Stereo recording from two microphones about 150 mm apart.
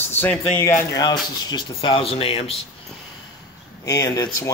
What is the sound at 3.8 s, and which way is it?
Speech, 20° left (ahead or behind).